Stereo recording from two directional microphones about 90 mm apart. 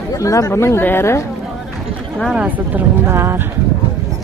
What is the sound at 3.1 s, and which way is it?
Speech, 30° right (ahead or behind).